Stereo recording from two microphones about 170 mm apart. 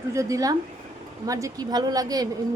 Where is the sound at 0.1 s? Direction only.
20° right (ahead or behind).